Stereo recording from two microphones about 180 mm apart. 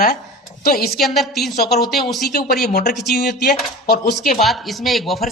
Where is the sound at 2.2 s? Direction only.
60° left (ahead or behind).